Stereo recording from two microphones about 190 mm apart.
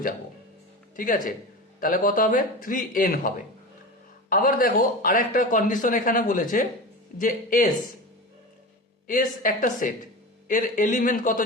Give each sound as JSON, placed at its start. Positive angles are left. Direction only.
{"t": 0.9, "sound": "a man's voice", "side_deg": 45}
{"t": 9.0, "sound": "a man's voice", "side_deg": 45}